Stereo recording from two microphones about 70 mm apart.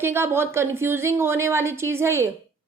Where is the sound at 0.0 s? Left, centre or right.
Right.